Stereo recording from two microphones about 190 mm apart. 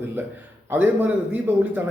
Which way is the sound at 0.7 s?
10° right (ahead or behind).